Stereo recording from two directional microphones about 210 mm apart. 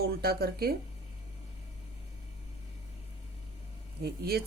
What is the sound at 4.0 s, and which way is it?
Speech, 50° right (ahead or behind).